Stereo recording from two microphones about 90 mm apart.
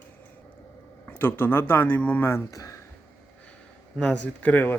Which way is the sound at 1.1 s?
20° left (ahead or behind).